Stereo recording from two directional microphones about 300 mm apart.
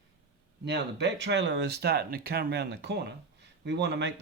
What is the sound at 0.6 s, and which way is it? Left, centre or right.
Speech, right.